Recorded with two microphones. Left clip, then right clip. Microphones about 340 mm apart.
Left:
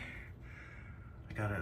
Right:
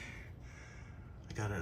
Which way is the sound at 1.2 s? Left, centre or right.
Centre.